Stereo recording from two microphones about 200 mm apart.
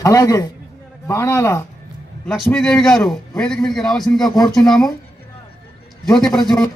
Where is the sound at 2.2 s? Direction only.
5° left (ahead or behind).